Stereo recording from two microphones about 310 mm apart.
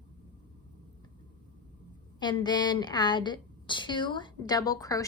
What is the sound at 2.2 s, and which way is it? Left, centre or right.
A woman's voice, centre.